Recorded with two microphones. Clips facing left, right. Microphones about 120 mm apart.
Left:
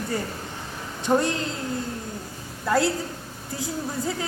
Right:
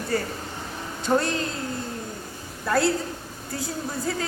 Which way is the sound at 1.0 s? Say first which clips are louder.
Left 1 dB; 15° left (ahead or behind).